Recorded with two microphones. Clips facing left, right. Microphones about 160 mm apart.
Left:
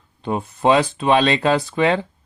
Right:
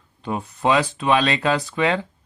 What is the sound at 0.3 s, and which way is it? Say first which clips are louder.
Speech: left 4 dB; 30° left (ahead or behind).